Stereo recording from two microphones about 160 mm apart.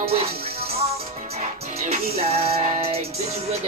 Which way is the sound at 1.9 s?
40° right (ahead or behind).